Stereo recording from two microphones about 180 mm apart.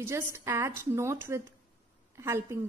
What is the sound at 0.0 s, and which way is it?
A woman's voice, 15° right (ahead or behind).